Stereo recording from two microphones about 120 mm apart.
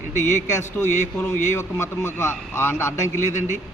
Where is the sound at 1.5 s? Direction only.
20° left (ahead or behind).